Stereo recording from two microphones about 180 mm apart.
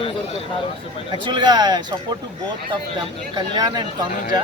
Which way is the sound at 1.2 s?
25° right (ahead or behind).